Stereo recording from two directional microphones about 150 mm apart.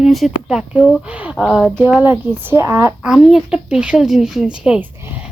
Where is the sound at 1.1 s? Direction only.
10° right (ahead or behind).